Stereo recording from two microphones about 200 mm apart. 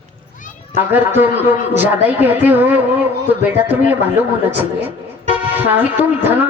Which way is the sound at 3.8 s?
10° right (ahead or behind).